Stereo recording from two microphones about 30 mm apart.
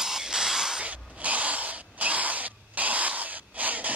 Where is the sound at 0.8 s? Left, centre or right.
Right.